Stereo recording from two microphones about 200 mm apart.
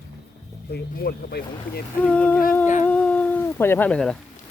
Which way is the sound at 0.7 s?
50° left (ahead or behind).